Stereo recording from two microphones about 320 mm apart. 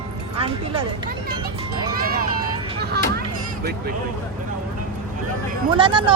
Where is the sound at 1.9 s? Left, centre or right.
Right.